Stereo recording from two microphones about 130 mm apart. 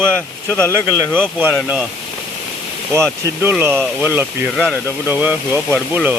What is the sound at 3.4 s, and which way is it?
Speech, 15° right (ahead or behind).